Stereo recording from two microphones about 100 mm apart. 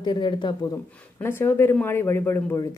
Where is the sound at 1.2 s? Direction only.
25° left (ahead or behind).